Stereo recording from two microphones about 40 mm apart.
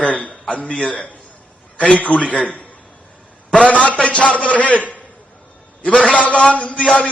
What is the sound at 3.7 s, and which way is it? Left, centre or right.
Speech, left.